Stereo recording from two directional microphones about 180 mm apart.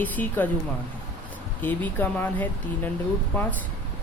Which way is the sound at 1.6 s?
10° left (ahead or behind).